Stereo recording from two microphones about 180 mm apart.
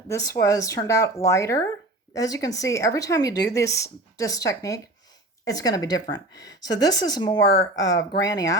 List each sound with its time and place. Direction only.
0.1 s speech: 15° left (ahead or behind)